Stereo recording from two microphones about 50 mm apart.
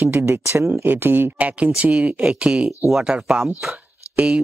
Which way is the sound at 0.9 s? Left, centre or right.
Right.